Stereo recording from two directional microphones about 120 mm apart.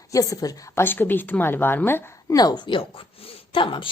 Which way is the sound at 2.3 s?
35° left (ahead or behind).